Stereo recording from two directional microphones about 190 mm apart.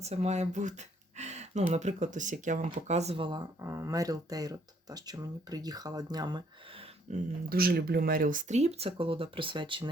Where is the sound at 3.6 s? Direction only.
15° right (ahead or behind).